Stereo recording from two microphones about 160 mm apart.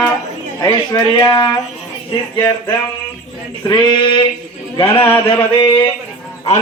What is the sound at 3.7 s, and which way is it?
Speech, 30° left (ahead or behind).